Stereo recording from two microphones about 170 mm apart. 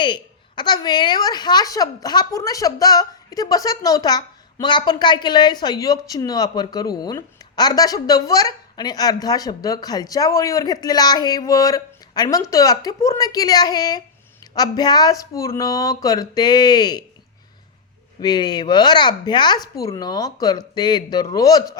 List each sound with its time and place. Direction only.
0.0 s a woman's voice: 25° left (ahead or behind)
18.2 s a woman's voice: 25° left (ahead or behind)